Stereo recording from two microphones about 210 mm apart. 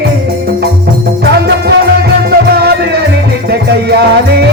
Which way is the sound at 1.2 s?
55° right (ahead or behind).